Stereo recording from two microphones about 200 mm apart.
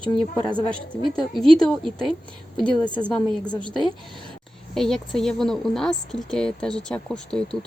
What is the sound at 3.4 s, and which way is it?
Speech, 25° left (ahead or behind).